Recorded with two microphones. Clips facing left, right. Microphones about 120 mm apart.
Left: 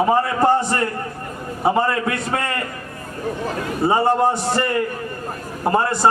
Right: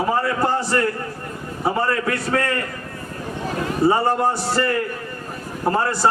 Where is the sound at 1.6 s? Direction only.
25° left (ahead or behind).